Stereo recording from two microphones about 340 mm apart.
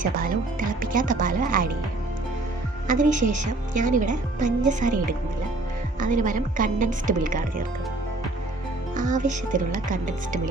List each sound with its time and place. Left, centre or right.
0.0 s a woman's voice: right
2.8 s a woman's voice: right
9.0 s a woman's voice: right